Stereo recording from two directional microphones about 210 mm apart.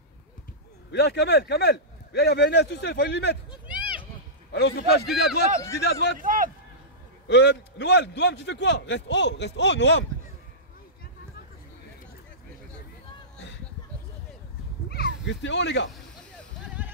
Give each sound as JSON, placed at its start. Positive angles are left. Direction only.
{"t": 0.9, "sound": "speech", "side_deg": 50}
{"t": 3.7, "sound": "a sound", "side_deg": -5}
{"t": 4.5, "sound": "a man's voice", "side_deg": 50}
{"t": 6.1, "sound": "speech", "side_deg": -40}
{"t": 7.2, "sound": "a man's voice", "side_deg": 55}
{"t": 14.9, "sound": "a sound", "side_deg": 50}